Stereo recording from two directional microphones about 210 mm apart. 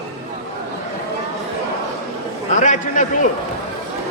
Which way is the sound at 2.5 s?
35° left (ahead or behind).